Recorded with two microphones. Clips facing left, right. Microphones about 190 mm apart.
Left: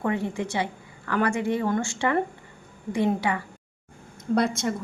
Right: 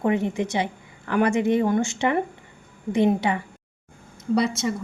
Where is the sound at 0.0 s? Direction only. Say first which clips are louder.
Right 4 dB; 20° right (ahead or behind).